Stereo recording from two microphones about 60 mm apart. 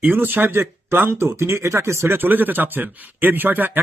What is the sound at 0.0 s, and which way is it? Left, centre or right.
Speech, right.